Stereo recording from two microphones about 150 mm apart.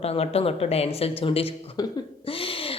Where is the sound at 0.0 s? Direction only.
40° left (ahead or behind).